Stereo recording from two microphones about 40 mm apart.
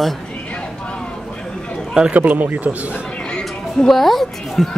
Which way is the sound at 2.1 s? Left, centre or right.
Right.